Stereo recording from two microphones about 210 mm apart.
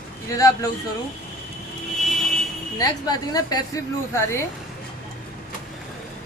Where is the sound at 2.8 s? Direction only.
20° left (ahead or behind).